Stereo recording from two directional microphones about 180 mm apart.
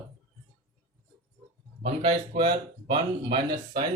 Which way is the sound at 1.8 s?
35° right (ahead or behind).